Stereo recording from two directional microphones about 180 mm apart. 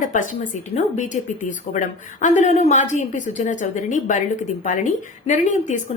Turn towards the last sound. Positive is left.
turn(degrees=40)  # may be behind; listen again after turning